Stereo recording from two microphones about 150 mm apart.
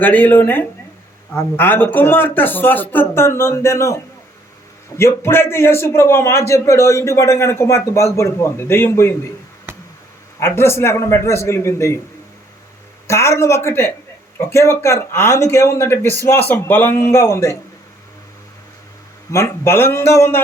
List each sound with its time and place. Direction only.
0.0 s a man's voice: 10° left (ahead or behind)
10.4 s a man's voice: 15° left (ahead or behind)
13.1 s a man's voice: 20° left (ahead or behind)
19.3 s a man's voice: 20° left (ahead or behind)